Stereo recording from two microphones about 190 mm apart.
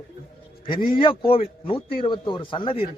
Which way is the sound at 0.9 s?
25° left (ahead or behind).